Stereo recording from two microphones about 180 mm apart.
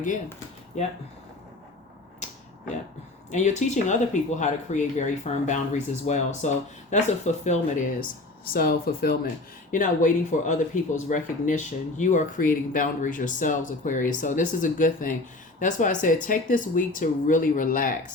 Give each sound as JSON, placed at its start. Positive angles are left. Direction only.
{"t": 0.7, "sound": "speech", "side_deg": 40}
{"t": 3.3, "sound": "speech", "side_deg": 40}
{"t": 8.5, "sound": "speech", "side_deg": 55}
{"t": 9.7, "sound": "speech", "side_deg": 45}